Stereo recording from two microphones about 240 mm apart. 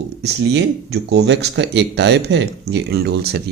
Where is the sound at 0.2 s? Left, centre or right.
Right.